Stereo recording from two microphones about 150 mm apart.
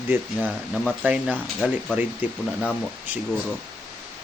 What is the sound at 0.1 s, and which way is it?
Speech, 15° right (ahead or behind).